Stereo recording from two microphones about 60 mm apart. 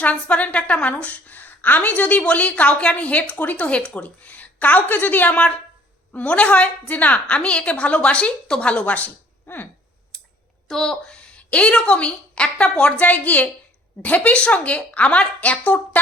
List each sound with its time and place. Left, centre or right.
0.0 s a woman's voice: left
10.7 s a woman's voice: centre; by 15.8 s left